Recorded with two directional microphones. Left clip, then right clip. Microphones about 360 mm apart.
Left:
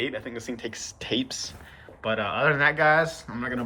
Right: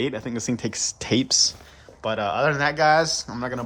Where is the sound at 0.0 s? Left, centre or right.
Centre.